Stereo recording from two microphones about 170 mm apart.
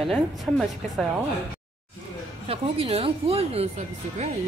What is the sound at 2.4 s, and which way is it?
Speech, 35° right (ahead or behind).